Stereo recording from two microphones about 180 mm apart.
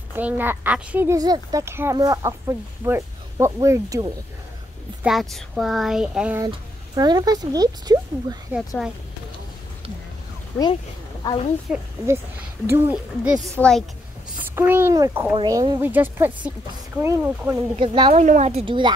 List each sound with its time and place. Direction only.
0.1 s speech: 10° right (ahead or behind)
1.1 s speech: 20° right (ahead or behind)
5.0 s speech: centre (ahead or behind)
7.0 s speech: 20° right (ahead or behind)
8.5 s speech: 5° right (ahead or behind)
11.2 s a woman's voice: 30° left (ahead or behind)
12.6 s speech: 10° right (ahead or behind); by 13.8 s 5° left (ahead or behind)
14.5 s speech: 10° right (ahead or behind)
15.3 s speech: 25° right (ahead or behind)
15.8 s speech: 10° right (ahead or behind)
17.7 s speech: 25° right (ahead or behind)
18.1 s speech: 40° right (ahead or behind)